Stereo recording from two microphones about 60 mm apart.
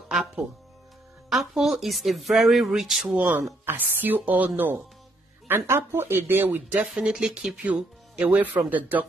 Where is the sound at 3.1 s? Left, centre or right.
Right.